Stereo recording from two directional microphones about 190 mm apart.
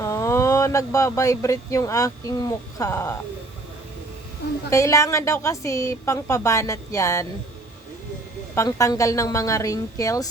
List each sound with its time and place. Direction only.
0.0 s speech: 15° left (ahead or behind)
4.7 s a woman's voice: 15° left (ahead or behind)
8.5 s a woman's voice: 15° left (ahead or behind)